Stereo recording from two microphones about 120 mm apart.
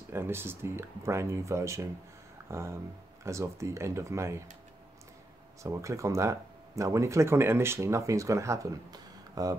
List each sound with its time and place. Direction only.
0.1 s speech: 20° right (ahead or behind)
2.4 s a sound: 25° right (ahead or behind)
3.3 s speech: 25° right (ahead or behind)
5.6 s speech: 25° right (ahead or behind)